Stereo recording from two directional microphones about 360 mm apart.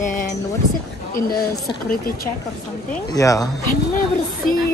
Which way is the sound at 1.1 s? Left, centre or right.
Left.